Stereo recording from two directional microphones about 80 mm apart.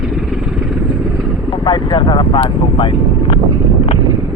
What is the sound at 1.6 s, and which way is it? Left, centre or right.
Vehicle, left.